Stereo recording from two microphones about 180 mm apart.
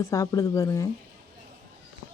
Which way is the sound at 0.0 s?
20° left (ahead or behind).